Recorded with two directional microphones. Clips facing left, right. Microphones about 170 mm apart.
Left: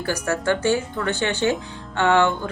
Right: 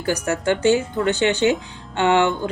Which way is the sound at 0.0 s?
20° right (ahead or behind).